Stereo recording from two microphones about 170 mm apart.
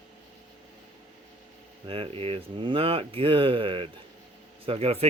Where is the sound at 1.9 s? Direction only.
35° right (ahead or behind).